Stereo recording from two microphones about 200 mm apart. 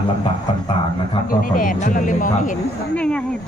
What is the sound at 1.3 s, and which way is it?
Speech, 45° left (ahead or behind).